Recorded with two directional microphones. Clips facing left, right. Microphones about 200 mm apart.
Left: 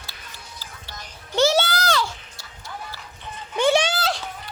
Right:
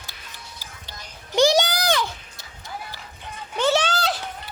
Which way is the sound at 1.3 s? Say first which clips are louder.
Right 1 dB; 15° right (ahead or behind).